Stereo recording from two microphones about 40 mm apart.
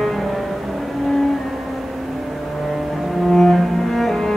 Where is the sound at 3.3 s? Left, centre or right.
Centre.